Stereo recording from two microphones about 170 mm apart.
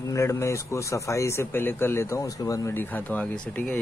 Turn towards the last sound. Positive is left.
turn(degrees=5)  # may be behind; listen again after turning